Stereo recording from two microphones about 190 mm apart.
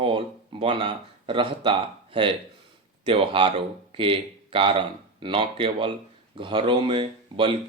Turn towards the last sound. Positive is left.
turn(degrees=-25)  # may be behind; listen again after turning